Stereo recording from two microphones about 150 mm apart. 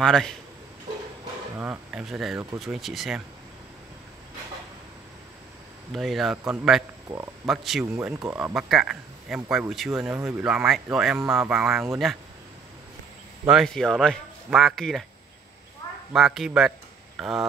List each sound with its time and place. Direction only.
0.0 s speech: 5° left (ahead or behind)
1.6 s speech: 10° right (ahead or behind)
5.9 s speech: centre (ahead or behind)
6.3 s a man's voice: 15° right (ahead or behind)
7.4 s speech: centre (ahead or behind)
13.5 s speech: centre (ahead or behind)
16.1 s speech: 5° right (ahead or behind)